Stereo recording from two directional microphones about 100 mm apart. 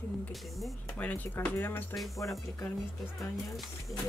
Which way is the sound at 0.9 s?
15° left (ahead or behind).